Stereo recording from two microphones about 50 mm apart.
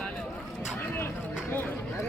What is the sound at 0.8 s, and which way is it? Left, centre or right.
Vehicle, left.